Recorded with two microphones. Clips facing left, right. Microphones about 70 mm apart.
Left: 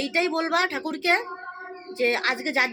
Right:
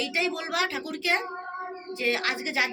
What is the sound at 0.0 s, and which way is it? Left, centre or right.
A woman's voice, left.